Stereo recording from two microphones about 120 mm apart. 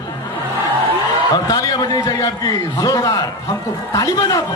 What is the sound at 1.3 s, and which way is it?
A man's voice, 30° left (ahead or behind).